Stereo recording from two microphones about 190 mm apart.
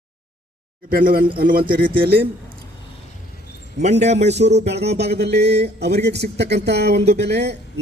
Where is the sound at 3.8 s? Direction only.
35° right (ahead or behind).